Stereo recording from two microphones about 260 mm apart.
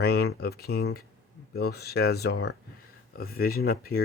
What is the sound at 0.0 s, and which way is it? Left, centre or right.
Speech, left.